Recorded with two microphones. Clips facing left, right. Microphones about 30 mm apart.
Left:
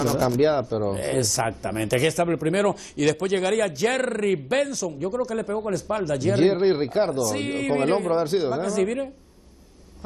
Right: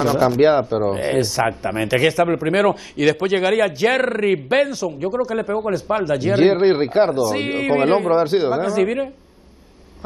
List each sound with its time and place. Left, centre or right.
0.0 s a man's voice: right